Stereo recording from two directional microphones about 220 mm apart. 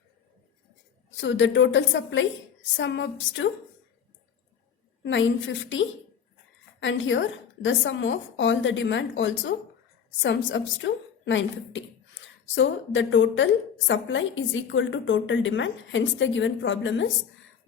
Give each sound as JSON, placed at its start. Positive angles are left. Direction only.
{"t": 1.1, "sound": "a woman's voice", "side_deg": 55}
{"t": 5.0, "sound": "a woman's voice", "side_deg": 55}